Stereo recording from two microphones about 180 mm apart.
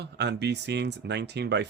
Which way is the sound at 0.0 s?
70° right (ahead or behind).